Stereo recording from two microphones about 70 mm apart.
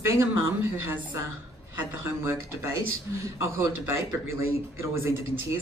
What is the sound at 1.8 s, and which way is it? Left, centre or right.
Speech, right.